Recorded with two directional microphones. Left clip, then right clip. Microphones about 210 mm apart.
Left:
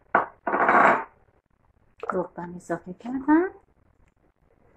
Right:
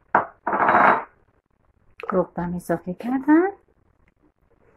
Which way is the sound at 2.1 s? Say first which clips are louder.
Right 6 dB; 45° right (ahead or behind).